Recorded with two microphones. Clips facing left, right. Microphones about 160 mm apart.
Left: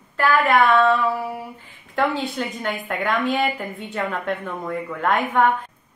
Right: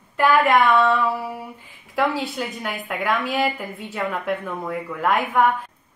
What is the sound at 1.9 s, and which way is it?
Speech, 5° right (ahead or behind).